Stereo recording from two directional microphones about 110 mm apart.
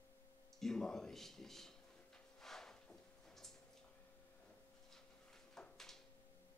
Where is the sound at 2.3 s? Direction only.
5° left (ahead or behind).